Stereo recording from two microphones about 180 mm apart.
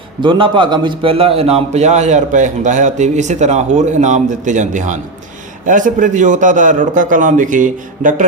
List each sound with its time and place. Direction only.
0.2 s a man's voice: 30° right (ahead or behind); by 8.3 s 45° right (ahead or behind)